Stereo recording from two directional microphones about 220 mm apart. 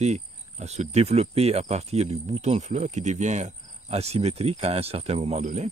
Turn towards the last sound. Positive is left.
turn(degrees=-30)  # may be behind; listen again after turning